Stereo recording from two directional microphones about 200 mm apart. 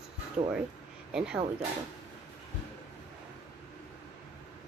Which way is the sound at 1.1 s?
5° right (ahead or behind).